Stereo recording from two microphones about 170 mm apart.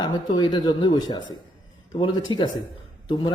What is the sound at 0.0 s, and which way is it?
Speech, 25° left (ahead or behind).